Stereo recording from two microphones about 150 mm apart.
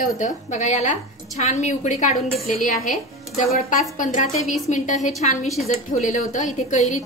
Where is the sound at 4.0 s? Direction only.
55° left (ahead or behind).